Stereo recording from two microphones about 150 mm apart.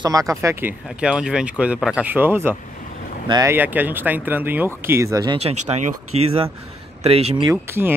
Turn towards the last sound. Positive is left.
turn(degrees=-15)  # may be behind; listen again after turning